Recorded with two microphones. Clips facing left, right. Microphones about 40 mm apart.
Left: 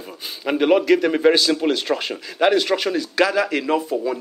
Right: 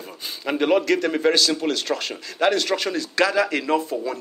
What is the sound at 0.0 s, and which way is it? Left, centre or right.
A man's voice, centre.